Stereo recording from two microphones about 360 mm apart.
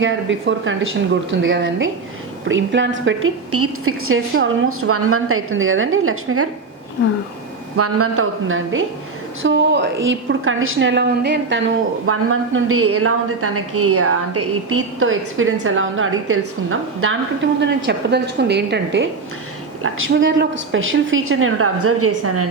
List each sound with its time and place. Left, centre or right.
0.0 s a woman's voice: right
7.8 s a woman's voice: right